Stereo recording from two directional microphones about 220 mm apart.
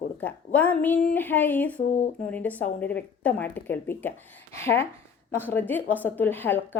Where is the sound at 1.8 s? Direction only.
35° left (ahead or behind).